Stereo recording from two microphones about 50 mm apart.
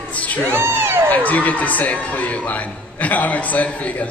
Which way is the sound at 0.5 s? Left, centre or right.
Right.